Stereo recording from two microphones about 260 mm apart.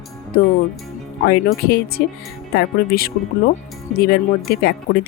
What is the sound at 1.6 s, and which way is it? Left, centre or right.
Speech, left.